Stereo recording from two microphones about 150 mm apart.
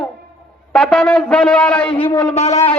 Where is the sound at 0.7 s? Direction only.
5° left (ahead or behind).